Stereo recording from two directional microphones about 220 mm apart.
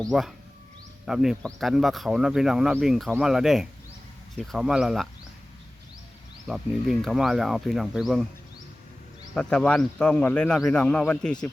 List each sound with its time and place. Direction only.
0.1 s speech: centre (ahead or behind)
6.5 s speech: centre (ahead or behind)
9.3 s speech: 5° left (ahead or behind)